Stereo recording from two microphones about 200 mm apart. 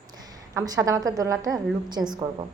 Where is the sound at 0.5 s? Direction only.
15° right (ahead or behind).